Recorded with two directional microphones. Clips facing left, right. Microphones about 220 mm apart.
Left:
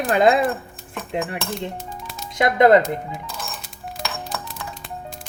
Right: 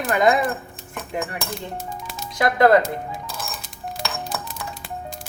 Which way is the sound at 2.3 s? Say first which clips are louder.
Left 2 dB; 20° left (ahead or behind).